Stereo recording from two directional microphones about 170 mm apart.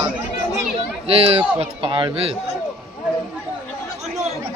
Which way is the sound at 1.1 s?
35° right (ahead or behind).